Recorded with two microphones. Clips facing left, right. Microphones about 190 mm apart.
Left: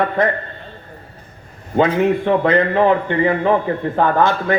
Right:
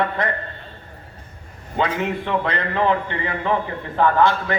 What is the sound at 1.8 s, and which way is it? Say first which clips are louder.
A man's voice: left 8 dB; 45° left (ahead or behind).